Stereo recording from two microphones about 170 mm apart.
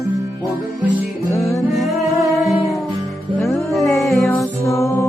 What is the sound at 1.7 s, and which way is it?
Music, centre (ahead or behind).